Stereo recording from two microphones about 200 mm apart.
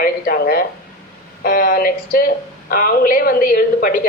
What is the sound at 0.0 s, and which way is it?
A woman's voice, 45° left (ahead or behind).